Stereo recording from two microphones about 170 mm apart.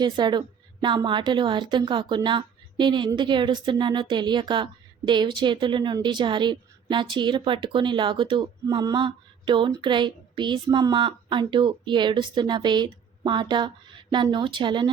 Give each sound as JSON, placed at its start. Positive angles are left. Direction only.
{"t": 0.0, "sound": "a woman's voice", "side_deg": -25}